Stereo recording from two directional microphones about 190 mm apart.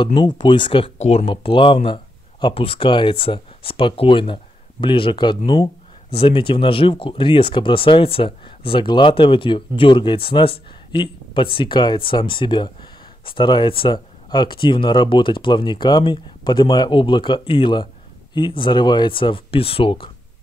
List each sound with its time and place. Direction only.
0.0 s speech: 25° left (ahead or behind)